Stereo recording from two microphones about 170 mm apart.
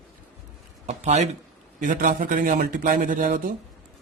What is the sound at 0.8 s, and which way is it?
Speech, 40° right (ahead or behind).